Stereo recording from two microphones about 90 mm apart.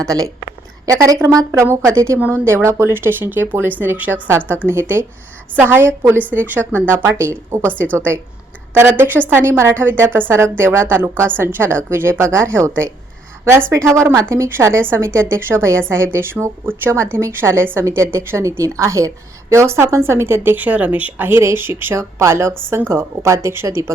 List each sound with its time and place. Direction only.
0.0 s a woman's voice: 40° right (ahead or behind)